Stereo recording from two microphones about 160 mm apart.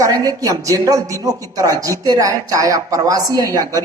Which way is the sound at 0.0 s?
25° right (ahead or behind).